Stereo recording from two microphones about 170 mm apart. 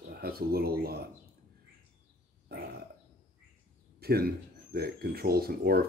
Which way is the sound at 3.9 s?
65° right (ahead or behind).